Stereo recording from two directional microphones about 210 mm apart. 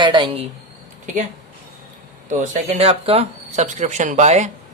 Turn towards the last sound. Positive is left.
turn(degrees=-35)  # may be behind; listen again after turning